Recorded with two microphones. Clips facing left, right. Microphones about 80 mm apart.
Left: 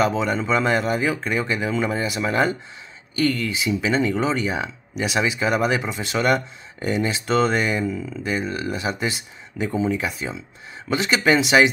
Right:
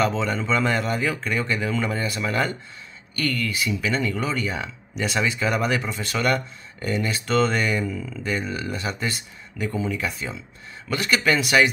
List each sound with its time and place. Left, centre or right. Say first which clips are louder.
0.0 s speech: left 2 dB; centre
4.9 s speech: left 2 dB; centre
8.8 s speech: left 3 dB; centre